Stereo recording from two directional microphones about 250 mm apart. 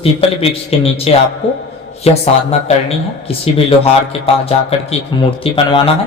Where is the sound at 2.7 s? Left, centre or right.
Left.